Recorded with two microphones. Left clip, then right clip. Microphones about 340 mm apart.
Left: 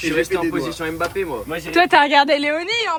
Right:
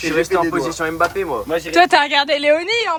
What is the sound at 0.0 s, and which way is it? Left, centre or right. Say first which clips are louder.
Speech: right 3 dB; right.